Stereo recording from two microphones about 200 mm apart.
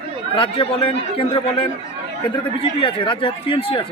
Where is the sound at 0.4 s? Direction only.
25° left (ahead or behind).